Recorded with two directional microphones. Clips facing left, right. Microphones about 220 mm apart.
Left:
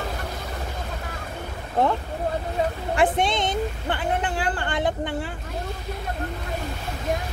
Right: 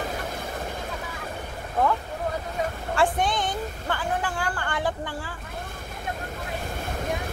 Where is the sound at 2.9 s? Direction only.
20° left (ahead or behind).